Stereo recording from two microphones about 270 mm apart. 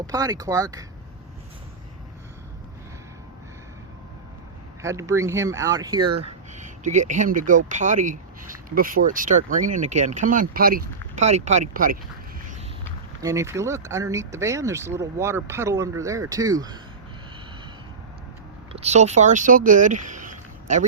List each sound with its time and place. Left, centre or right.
0.1 s speech: centre
4.8 s speech: centre; by 11.9 s right
13.2 s speech: centre
18.7 s speech: right
20.1 s a sound: right